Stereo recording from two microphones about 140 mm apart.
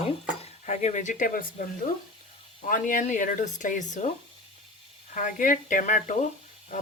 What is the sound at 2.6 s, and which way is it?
Speech, 70° left (ahead or behind).